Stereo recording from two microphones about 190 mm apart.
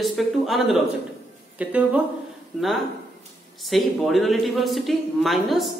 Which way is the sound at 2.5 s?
5° left (ahead or behind).